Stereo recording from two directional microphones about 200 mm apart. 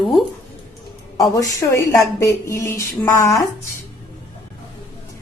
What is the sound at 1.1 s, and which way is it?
A woman's voice, 15° left (ahead or behind).